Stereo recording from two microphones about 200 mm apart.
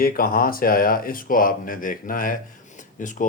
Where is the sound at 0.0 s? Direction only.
45° left (ahead or behind).